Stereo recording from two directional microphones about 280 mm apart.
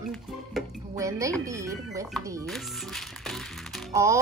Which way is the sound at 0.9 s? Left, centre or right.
Centre.